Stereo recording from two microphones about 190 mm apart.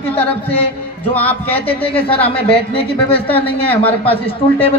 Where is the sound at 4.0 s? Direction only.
30° left (ahead or behind).